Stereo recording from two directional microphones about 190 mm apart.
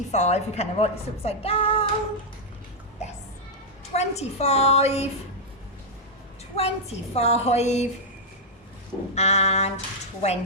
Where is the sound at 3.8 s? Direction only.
35° left (ahead or behind).